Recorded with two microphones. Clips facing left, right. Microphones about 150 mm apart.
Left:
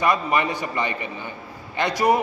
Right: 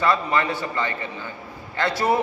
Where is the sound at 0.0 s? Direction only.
15° left (ahead or behind).